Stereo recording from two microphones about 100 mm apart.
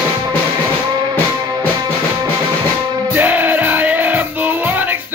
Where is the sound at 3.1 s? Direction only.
15° right (ahead or behind).